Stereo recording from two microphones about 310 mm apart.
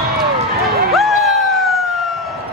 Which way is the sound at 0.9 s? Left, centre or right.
Centre.